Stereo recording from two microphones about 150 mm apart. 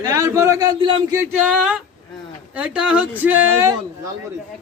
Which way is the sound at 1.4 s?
5° right (ahead or behind).